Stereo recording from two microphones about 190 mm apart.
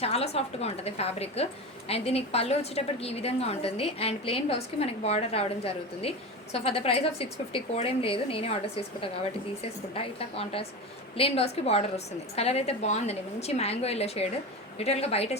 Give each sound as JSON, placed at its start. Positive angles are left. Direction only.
{"t": 0.0, "sound": "a woman's voice", "side_deg": 35}